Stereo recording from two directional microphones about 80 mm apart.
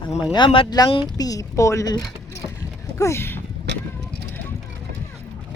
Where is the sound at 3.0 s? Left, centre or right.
Left.